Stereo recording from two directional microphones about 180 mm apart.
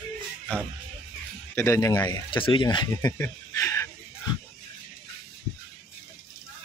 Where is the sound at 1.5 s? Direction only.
15° left (ahead or behind).